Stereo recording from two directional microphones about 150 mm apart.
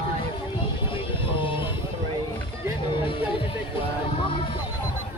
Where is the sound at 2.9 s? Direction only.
35° left (ahead or behind).